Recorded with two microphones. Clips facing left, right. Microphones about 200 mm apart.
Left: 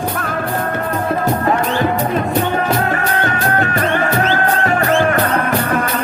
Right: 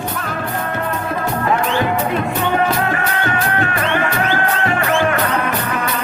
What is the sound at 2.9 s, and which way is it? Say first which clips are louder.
Music: left 2 dB; 40° left (ahead or behind).